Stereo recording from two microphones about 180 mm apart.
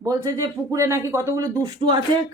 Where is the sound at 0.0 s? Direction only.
15° right (ahead or behind).